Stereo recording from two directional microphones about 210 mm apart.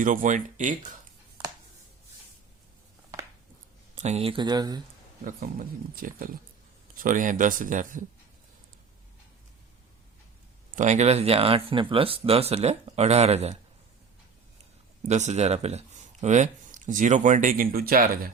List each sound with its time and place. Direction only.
0.0 s speech: 40° right (ahead or behind)
3.9 s speech: 30° right (ahead or behind)
5.2 s speech: 40° right (ahead or behind)
10.8 s speech: 35° right (ahead or behind)
15.0 s speech: 35° right (ahead or behind)